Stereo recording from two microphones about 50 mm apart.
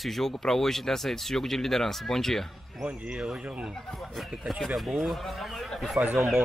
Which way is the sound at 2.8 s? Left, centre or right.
Centre.